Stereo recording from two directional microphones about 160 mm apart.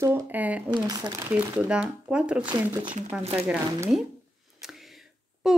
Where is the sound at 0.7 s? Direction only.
25° right (ahead or behind).